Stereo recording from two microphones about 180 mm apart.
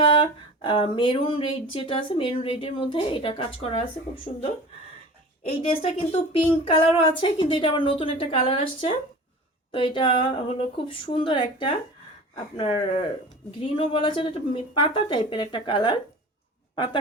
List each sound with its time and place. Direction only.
0.0 s speech: 25° left (ahead or behind)
5.5 s speech: 30° left (ahead or behind)